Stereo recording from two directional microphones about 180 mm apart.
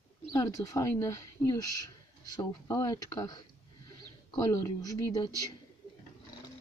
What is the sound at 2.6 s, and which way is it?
Speech, 20° left (ahead or behind).